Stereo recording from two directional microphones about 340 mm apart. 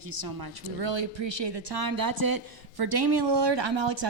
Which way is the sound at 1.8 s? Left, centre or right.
Right.